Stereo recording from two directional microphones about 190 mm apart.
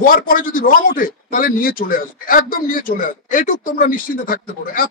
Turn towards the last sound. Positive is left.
turn(degrees=45)  # may be behind; listen again after turning